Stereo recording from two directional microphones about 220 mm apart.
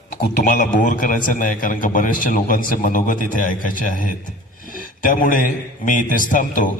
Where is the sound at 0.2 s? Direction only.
35° left (ahead or behind).